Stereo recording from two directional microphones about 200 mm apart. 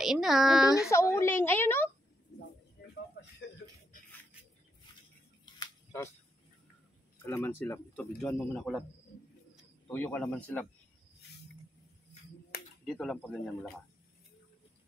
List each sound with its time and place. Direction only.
0.0 s speech: centre (ahead or behind)
0.8 s speech: 15° left (ahead or behind)
2.8 s music: 50° left (ahead or behind)
7.2 s speech: 10° left (ahead or behind)
9.8 s speech: 5° left (ahead or behind)
12.8 s speech: centre (ahead or behind)